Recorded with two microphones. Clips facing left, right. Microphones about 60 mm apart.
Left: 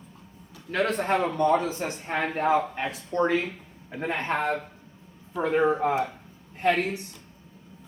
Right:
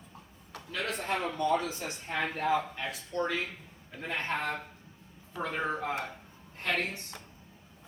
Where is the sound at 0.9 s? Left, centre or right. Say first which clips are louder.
Left 8 dB; left.